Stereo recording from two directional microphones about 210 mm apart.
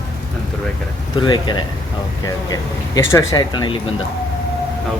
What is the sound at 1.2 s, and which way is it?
Speech, 20° left (ahead or behind).